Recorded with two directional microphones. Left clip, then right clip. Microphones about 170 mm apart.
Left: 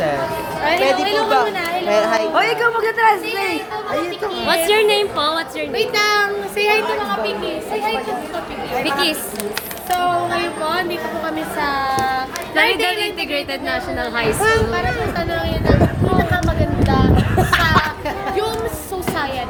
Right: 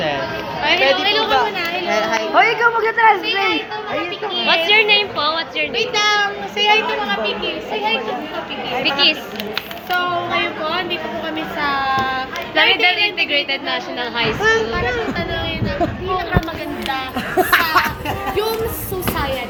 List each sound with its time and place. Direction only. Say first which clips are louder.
0.6 s chatter: right 1 dB; 40° left (ahead or behind)
1.9 s a sound: left 3 dB; 80° left
2.3 s a woman's voice: right 2 dB; 40° right (ahead or behind)
3.5 s a woman's voice: right 1 dB; 25° left (ahead or behind)
4.4 s a woman's voice: right 1 dB; 90° left
5.7 s a child's voice: left 1 dB; 45° left (ahead or behind)
8.8 s speech: right 4 dB; 90° left
9.9 s a woman's voice: left 1 dB; 25° left (ahead or behind)
11.6 s child singing: right 1 dB; 30° left (ahead or behind)
12.5 s a woman's voice: right 2 dB; 65° left (ahead or behind)
14.2 s a woman's voice: even; 85° left
17.2 s a sound: right 1 dB; 55° right (ahead or behind)